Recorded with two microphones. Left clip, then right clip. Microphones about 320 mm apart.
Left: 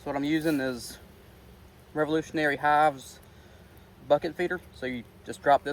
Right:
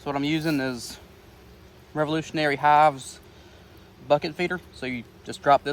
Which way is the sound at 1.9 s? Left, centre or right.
Right.